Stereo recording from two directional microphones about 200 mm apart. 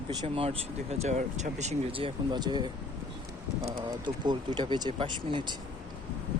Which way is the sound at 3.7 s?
25° right (ahead or behind).